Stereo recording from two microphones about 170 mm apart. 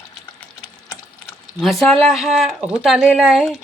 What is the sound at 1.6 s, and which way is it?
Speech, centre (ahead or behind).